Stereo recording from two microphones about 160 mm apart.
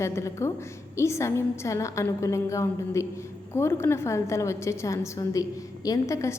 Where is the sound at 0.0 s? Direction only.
20° left (ahead or behind).